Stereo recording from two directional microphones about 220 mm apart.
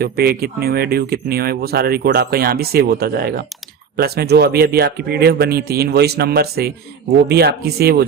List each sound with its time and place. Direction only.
0.0 s speech: 45° right (ahead or behind)